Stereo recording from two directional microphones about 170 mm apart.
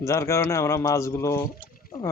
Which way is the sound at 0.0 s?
15° left (ahead or behind).